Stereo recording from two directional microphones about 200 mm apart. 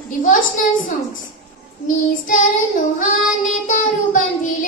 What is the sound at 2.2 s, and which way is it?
Child singing, 40° left (ahead or behind).